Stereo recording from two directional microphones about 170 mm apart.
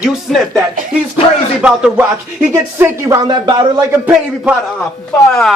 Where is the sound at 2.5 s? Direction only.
15° right (ahead or behind).